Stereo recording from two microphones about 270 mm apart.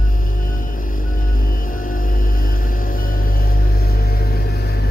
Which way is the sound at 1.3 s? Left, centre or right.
Left.